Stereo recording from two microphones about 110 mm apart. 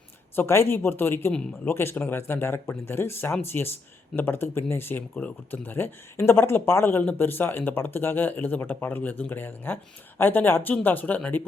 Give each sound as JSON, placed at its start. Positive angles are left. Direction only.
{"t": 0.3, "sound": "speech", "side_deg": 25}
{"t": 1.3, "sound": "speech", "side_deg": 10}
{"t": 1.7, "sound": "speech", "side_deg": 20}